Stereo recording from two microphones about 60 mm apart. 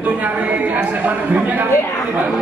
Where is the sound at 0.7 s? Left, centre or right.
Right.